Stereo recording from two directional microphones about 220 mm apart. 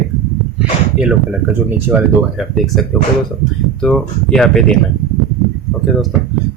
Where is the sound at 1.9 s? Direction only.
5° right (ahead or behind).